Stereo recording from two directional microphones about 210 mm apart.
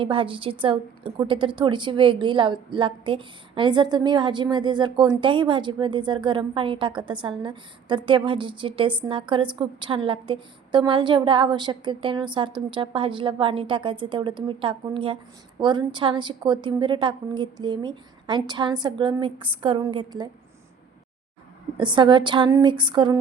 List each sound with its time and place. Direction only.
0.0 s a woman's voice: 25° right (ahead or behind)
21.8 s a woman's voice: 20° right (ahead or behind)